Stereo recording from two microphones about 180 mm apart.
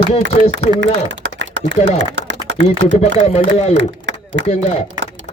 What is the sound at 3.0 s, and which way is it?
Speech, 35° left (ahead or behind).